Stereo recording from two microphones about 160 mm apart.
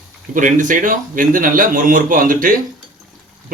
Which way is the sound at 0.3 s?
55° right (ahead or behind).